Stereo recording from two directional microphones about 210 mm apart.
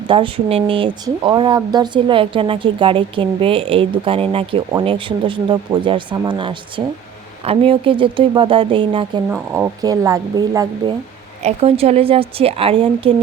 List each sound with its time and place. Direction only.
0.1 s speech: 25° right (ahead or behind)
9.3 s speech: 10° right (ahead or behind)
11.4 s speech: 30° right (ahead or behind)